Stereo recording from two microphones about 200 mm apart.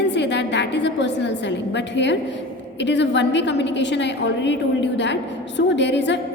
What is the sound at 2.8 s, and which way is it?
A woman's voice, 60° left (ahead or behind).